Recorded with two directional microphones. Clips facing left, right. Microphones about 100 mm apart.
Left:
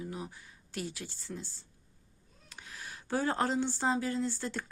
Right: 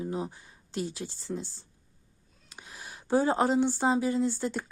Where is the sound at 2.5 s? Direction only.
20° right (ahead or behind).